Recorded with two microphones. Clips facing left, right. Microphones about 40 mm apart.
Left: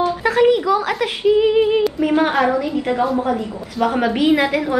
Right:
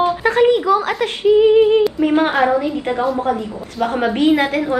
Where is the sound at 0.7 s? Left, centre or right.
Centre.